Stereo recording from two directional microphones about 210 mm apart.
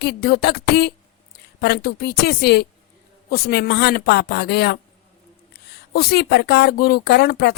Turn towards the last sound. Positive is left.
turn(degrees=50)  # may be behind; listen again after turning